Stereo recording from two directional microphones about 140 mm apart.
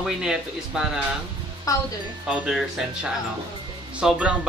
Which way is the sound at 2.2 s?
5° right (ahead or behind).